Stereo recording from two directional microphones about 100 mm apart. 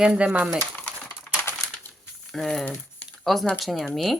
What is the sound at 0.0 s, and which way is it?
Speech, 10° right (ahead or behind).